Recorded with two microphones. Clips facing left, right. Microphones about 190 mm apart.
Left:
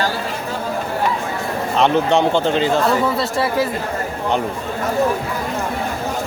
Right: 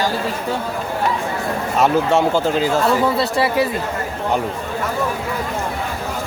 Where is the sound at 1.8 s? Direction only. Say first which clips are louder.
Even; 5° right (ahead or behind).